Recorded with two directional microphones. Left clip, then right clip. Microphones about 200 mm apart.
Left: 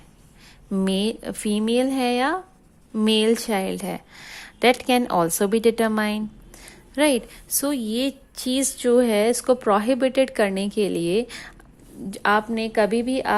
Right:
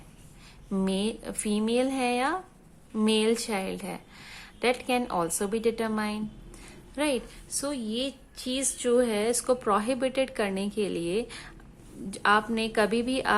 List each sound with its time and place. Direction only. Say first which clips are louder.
0.7 s a woman's voice: left 6 dB; 25° left (ahead or behind)